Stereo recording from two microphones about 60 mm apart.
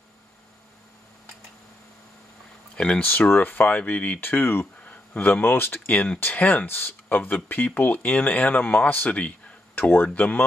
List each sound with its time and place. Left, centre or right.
2.7 s speech: centre
3.1 s speech: left